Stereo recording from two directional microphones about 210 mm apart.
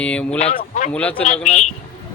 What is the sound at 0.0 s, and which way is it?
Speech, 5° left (ahead or behind).